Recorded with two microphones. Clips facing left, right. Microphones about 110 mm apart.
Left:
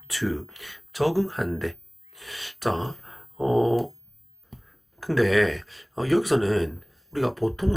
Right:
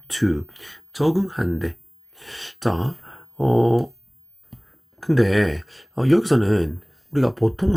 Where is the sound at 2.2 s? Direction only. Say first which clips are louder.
Right 3 dB; 30° right (ahead or behind).